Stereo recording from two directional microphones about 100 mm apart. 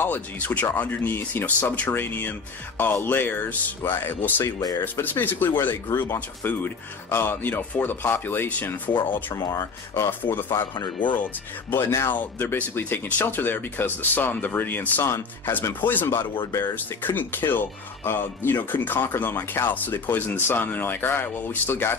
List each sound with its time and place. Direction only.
0.0 s speech: 20° left (ahead or behind)
9.3 s speech: 35° left (ahead or behind)
10.7 s speech: 50° left (ahead or behind)
11.7 s speech: 25° left (ahead or behind)